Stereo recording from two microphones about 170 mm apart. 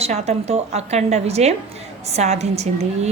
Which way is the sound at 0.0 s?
40° right (ahead or behind).